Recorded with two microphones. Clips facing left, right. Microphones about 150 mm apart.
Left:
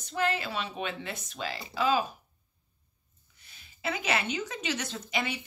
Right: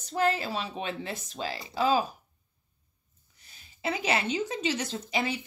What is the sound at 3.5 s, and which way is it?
A woman's voice, 35° right (ahead or behind).